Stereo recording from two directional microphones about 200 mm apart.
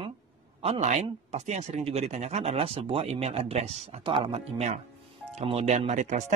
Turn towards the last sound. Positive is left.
turn(degrees=-40)  # may be behind; listen again after turning